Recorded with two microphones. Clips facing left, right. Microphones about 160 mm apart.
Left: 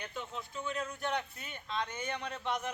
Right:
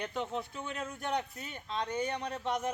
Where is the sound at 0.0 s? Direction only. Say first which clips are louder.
Right 6 dB; 65° right (ahead or behind).